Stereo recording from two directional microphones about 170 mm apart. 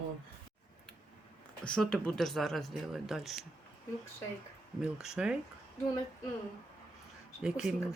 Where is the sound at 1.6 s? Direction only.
5° left (ahead or behind).